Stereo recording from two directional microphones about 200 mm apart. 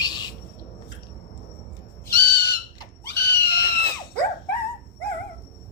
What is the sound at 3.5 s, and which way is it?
Screaming, 55° left (ahead or behind).